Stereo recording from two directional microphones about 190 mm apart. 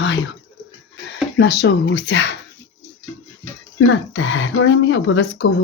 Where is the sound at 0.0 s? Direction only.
70° left (ahead or behind).